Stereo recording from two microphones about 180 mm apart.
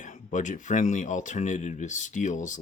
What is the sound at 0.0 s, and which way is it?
Speech, 45° left (ahead or behind).